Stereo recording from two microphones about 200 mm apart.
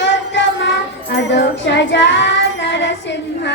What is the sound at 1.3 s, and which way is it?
Child singing, 60° left (ahead or behind).